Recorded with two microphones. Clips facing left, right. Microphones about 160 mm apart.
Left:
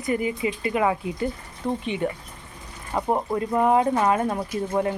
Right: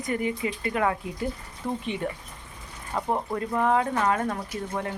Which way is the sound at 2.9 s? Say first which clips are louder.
Left 4 dB; 15° left (ahead or behind).